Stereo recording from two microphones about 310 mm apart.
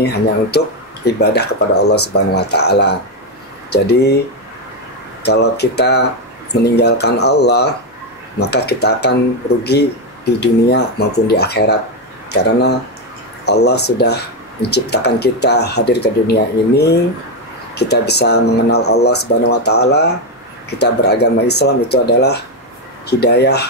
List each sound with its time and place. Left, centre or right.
0.0 s speech: left
5.2 s speech: left